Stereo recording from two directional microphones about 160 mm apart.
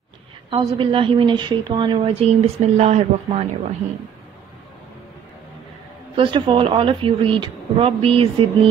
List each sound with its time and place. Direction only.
0.5 s a woman's voice: 35° right (ahead or behind)
6.1 s a woman's voice: 30° right (ahead or behind)